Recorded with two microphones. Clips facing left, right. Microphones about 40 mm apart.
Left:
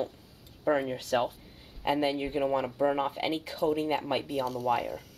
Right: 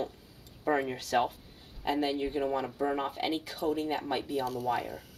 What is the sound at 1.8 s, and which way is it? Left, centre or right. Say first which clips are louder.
Speech: left 2 dB; left.